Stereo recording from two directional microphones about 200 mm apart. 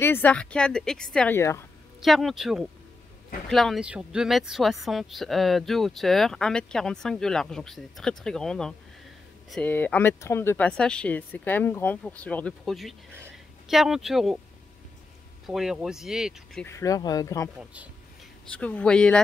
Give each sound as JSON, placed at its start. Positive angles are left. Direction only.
{"t": 0.0, "sound": "speech", "side_deg": 10}
{"t": 2.0, "sound": "speech", "side_deg": 0}
{"t": 15.4, "sound": "speech", "side_deg": 0}
{"t": 16.6, "sound": "speech", "side_deg": 15}
{"t": 18.5, "sound": "speech", "side_deg": 5}